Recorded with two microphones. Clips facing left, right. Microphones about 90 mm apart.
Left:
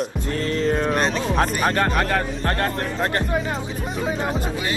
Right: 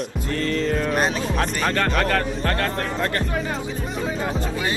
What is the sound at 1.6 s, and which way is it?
Speech, 20° left (ahead or behind).